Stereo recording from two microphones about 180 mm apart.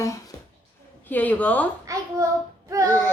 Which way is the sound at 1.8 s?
15° right (ahead or behind).